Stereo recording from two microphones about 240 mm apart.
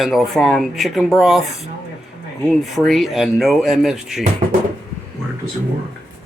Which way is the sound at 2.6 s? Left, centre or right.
Centre.